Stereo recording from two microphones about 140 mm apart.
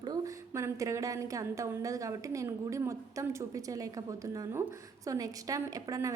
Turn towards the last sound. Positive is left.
turn(degrees=-25)  # may be behind; listen again after turning